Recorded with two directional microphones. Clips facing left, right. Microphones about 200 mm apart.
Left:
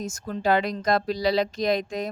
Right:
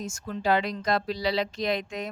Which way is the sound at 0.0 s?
40° left (ahead or behind).